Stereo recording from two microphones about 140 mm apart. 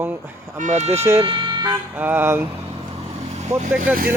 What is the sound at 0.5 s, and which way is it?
Speech, 60° right (ahead or behind).